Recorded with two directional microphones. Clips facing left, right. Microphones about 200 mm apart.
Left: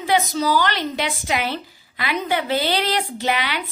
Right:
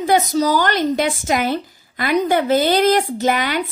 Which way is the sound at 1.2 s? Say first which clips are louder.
Right 5 dB; 45° right (ahead or behind).